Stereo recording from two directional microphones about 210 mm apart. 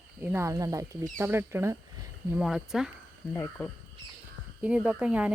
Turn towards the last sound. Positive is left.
turn(degrees=-5)  # may be behind; listen again after turning